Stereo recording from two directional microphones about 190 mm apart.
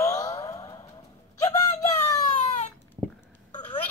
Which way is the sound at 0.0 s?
20° left (ahead or behind).